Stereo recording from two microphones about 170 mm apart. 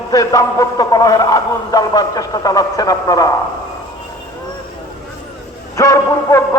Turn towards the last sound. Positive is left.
turn(degrees=15)  # may be behind; listen again after turning